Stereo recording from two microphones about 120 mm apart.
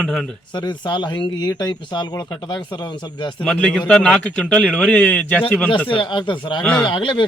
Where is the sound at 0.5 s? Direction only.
40° left (ahead or behind).